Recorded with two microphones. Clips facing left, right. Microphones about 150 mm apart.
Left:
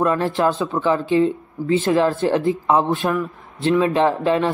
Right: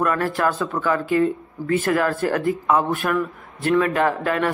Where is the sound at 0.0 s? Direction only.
20° left (ahead or behind).